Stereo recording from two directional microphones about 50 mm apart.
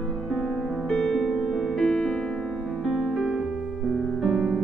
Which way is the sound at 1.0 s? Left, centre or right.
Centre.